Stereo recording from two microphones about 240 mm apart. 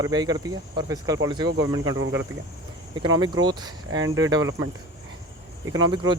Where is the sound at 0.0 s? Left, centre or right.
Centre.